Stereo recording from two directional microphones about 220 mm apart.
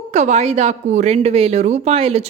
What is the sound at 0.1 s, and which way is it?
A woman's voice, 30° right (ahead or behind).